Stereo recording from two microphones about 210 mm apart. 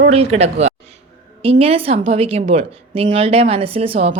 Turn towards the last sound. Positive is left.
turn(degrees=-30)  # may be behind; listen again after turning